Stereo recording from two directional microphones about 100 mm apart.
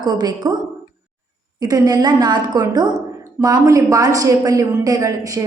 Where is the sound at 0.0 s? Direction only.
45° right (ahead or behind).